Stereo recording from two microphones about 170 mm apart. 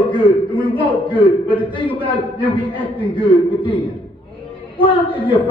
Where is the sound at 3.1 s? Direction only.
30° left (ahead or behind).